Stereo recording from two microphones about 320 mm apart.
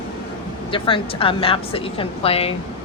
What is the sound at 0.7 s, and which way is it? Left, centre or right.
A woman's voice, centre.